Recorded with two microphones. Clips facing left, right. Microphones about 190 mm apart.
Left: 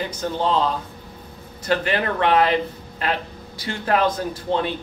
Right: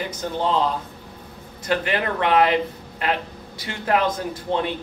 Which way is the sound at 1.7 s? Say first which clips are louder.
Left 1 dB; 20° right (ahead or behind).